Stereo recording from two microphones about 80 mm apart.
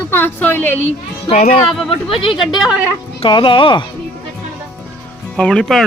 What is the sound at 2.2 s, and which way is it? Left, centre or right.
Speech, left.